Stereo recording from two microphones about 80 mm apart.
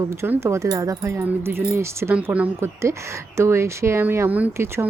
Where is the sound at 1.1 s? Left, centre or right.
Right.